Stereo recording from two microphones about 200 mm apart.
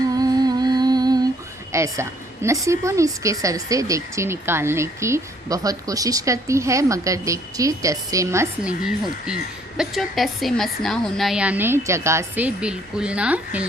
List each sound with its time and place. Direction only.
0.1 s humming: 20° right (ahead or behind)
1.7 s a woman's voice: 15° right (ahead or behind)